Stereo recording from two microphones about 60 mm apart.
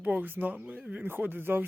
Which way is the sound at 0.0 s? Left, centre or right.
Right.